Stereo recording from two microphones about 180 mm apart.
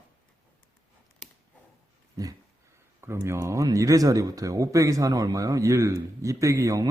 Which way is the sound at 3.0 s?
15° right (ahead or behind).